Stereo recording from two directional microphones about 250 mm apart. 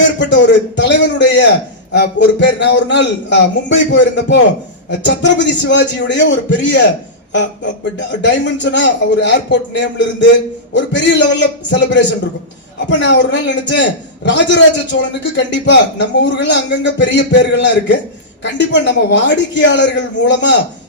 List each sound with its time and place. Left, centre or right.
0.2 s a man's voice: left
8.2 s a man's voice: left